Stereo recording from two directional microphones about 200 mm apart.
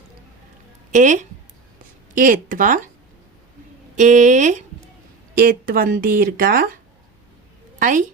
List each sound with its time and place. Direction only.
0.9 s a woman's voice: 40° right (ahead or behind)
3.9 s speech: 40° right (ahead or behind)
7.8 s a woman's voice: 40° right (ahead or behind)